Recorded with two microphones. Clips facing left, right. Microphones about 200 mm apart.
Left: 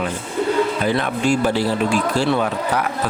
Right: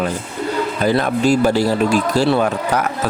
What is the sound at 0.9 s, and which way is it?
Speech, 40° right (ahead or behind).